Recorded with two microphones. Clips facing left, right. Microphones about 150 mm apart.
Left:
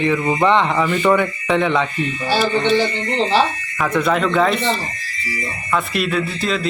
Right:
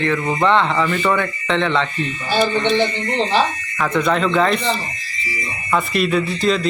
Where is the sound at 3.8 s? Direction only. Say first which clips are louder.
Even; 5° left (ahead or behind).